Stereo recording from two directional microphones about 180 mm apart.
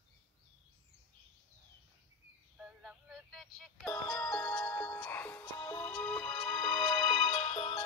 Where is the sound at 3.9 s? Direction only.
20° left (ahead or behind).